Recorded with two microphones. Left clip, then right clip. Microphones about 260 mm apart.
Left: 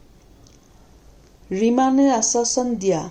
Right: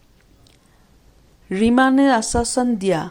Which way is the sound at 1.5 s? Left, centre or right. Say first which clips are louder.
Right 2 dB; right.